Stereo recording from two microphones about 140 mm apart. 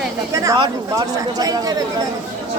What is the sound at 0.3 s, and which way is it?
Speech, 25° right (ahead or behind).